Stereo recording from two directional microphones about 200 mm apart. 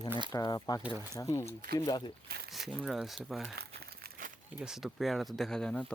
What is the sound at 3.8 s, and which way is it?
Crumpling, 50° right (ahead or behind).